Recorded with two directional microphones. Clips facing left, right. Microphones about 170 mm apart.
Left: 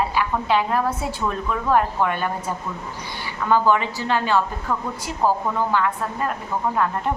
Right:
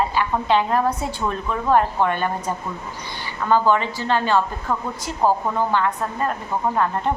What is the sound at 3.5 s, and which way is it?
Speech, 10° left (ahead or behind).